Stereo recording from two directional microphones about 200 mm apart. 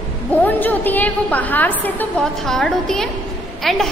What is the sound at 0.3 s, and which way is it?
A woman's voice, 10° left (ahead or behind).